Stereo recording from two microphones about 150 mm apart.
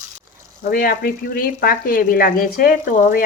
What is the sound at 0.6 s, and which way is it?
Speech, 75° left (ahead or behind).